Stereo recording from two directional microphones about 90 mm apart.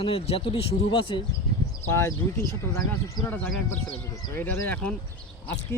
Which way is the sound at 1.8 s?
30° left (ahead or behind).